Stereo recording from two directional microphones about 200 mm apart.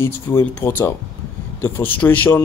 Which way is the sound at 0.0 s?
10° left (ahead or behind).